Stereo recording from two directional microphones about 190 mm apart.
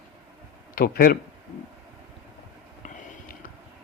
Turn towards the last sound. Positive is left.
turn(degrees=45)  # may be behind; listen again after turning